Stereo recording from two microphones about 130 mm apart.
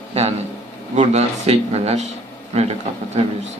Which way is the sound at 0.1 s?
55° right (ahead or behind).